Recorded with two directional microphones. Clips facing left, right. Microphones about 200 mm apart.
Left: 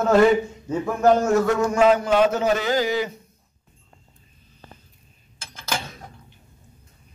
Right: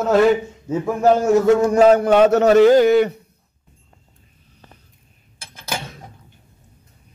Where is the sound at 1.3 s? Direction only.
25° right (ahead or behind).